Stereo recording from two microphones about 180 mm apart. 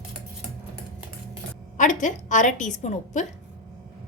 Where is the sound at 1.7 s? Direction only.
45° left (ahead or behind).